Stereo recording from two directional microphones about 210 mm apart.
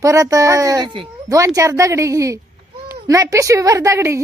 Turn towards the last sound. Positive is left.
turn(degrees=-15)  # may be behind; listen again after turning